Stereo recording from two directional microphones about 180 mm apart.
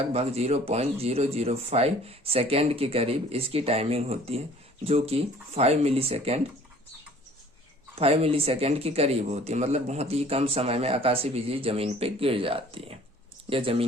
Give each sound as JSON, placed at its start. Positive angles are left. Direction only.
{"t": 0.0, "sound": "speech", "side_deg": -35}
{"t": 7.9, "sound": "speech", "side_deg": -35}